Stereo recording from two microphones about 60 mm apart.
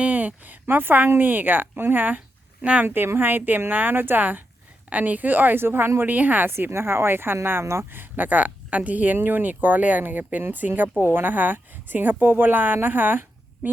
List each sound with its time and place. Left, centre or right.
0.0 s a woman's voice: right
2.8 s a woman's voice: right
6.5 s a woman's voice: right